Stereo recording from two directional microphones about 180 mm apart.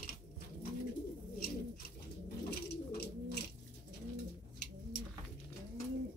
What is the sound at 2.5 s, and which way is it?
Bird, 65° left (ahead or behind).